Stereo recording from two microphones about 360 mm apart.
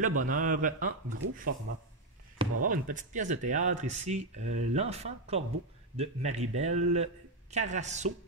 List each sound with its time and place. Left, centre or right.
0.0 s speech: right
2.6 s speech: right